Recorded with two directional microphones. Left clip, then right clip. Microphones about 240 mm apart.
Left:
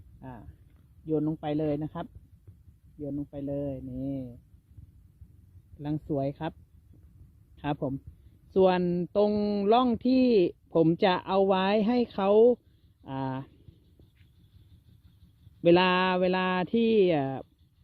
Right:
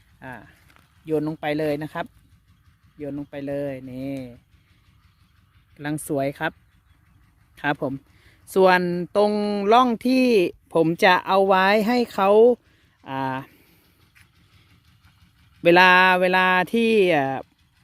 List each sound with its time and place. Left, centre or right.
0.2 s speech: centre
3.1 s speech: right
3.3 s speech: centre
3.9 s speech: right
5.8 s speech: right
7.5 s speech: right
10.0 s speech: right
10.7 s speech: centre
15.6 s speech: right